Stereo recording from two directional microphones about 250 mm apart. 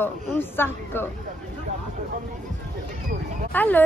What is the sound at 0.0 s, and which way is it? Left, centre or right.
Speech, centre.